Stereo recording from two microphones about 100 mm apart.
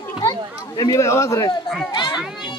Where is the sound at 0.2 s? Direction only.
40° left (ahead or behind).